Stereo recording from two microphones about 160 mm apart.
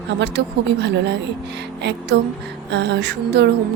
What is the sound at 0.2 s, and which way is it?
Speech, 90° right.